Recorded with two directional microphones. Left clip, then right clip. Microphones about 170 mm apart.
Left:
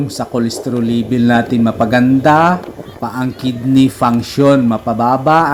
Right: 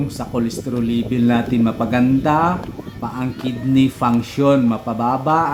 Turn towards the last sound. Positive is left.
turn(degrees=20)  # may be behind; listen again after turning